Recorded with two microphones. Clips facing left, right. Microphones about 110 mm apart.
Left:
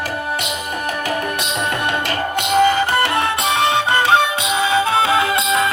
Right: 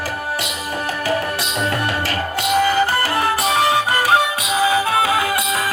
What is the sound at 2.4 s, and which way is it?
Music, 25° left (ahead or behind).